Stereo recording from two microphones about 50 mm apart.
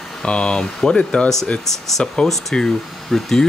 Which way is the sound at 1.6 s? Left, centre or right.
Centre.